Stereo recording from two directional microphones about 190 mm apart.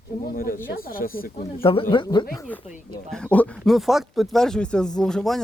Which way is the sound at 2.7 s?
45° left (ahead or behind).